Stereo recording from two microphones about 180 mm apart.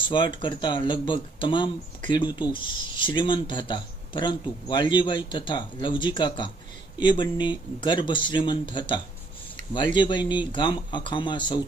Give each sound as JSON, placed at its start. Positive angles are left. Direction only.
{"t": 0.1, "sound": "speech", "side_deg": 25}